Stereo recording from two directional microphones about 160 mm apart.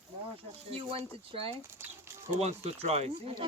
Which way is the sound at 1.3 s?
35° right (ahead or behind).